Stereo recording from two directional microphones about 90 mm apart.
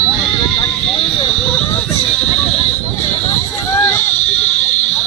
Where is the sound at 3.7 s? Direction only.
30° left (ahead or behind).